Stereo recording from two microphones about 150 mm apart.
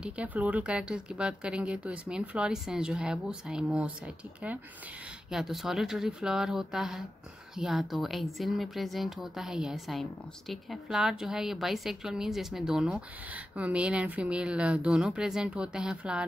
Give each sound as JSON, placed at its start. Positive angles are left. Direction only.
{"t": 0.0, "sound": "a woman's voice", "side_deg": -10}